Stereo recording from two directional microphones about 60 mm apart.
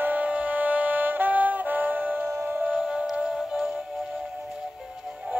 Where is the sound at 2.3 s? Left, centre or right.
Right.